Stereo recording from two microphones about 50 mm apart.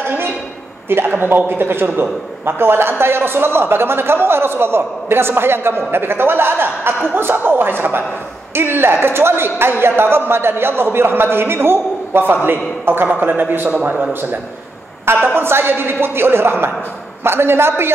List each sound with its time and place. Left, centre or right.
0.8 s a man's voice: right
15.3 s a man's voice: right